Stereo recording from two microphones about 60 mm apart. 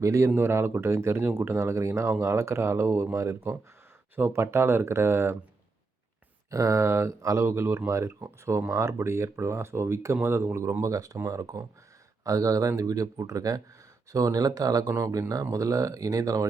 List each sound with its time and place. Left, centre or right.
0.0 s speech: right
0.3 s speech: right
6.5 s speech: right
7.4 s speech: right